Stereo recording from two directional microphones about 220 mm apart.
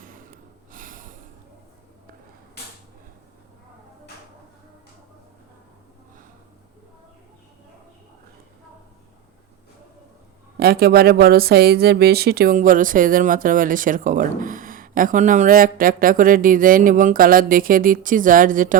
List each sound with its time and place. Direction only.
0.0 s snort: 40° right (ahead or behind)
10.6 s speech: 45° right (ahead or behind)